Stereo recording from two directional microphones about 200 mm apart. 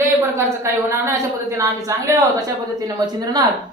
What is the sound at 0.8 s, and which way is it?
Female singing, 15° right (ahead or behind).